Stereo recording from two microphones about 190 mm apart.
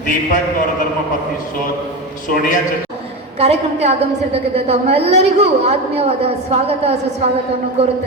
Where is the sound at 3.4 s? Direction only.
35° right (ahead or behind).